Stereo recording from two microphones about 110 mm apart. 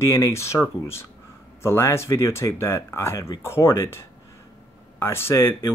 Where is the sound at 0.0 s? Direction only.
25° left (ahead or behind).